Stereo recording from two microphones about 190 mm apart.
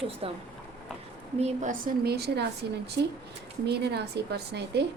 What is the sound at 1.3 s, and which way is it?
A woman's voice, 35° right (ahead or behind).